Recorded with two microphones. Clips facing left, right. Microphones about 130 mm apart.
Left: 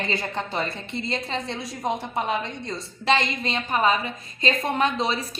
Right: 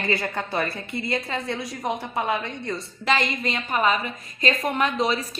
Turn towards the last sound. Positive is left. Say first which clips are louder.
# right 1 dB
turn(degrees=30)  # may be behind; listen again after turning